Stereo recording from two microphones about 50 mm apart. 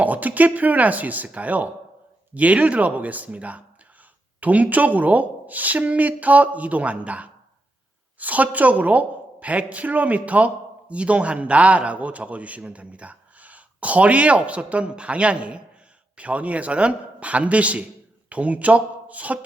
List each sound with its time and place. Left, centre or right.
0.0 s a woman's voice: right